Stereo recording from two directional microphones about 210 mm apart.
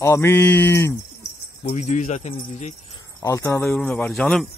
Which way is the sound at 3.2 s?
15° left (ahead or behind).